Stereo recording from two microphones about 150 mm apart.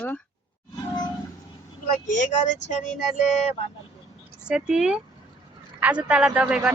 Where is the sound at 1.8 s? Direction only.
60° left (ahead or behind).